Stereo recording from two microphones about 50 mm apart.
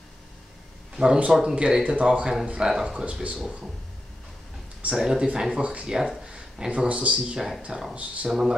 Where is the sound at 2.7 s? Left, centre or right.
Centre.